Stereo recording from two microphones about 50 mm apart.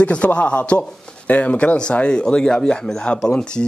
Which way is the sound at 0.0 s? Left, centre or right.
Left.